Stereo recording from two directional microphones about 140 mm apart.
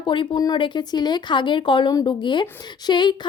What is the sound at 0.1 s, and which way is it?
Speech, 30° left (ahead or behind).